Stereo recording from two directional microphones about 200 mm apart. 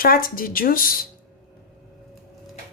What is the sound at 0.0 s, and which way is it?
Speech, 45° left (ahead or behind).